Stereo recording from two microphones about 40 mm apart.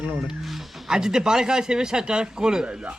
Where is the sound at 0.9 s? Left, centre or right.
Centre.